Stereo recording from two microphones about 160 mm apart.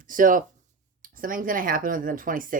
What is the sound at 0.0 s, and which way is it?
Speech, 55° right (ahead or behind).